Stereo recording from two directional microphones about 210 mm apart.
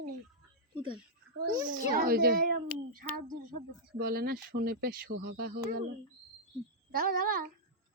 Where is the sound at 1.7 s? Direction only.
40° right (ahead or behind).